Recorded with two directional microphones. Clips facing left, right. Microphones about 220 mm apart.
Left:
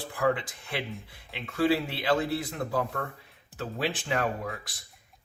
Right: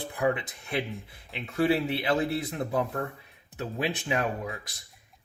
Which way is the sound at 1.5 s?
25° right (ahead or behind).